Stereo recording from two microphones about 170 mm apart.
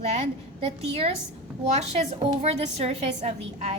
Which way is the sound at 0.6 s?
35° right (ahead or behind).